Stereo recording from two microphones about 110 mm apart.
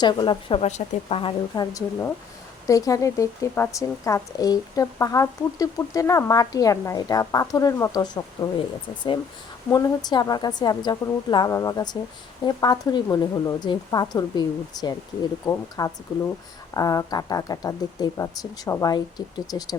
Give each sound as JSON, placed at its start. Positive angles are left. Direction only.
{"t": 0.0, "sound": "a woman's voice", "side_deg": 45}
{"t": 0.6, "sound": "a woman's voice", "side_deg": 70}
{"t": 1.5, "sound": "speech", "side_deg": 35}
{"t": 9.7, "sound": "speech", "side_deg": 40}